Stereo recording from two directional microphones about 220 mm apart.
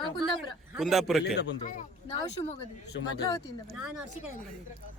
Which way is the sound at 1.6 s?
35° left (ahead or behind).